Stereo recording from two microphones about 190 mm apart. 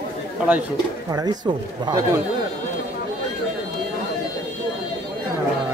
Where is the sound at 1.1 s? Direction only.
20° right (ahead or behind).